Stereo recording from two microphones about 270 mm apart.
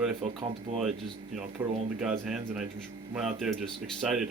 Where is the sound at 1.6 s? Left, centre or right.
Centre.